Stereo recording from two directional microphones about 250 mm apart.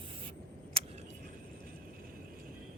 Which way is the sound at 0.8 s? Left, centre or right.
Right.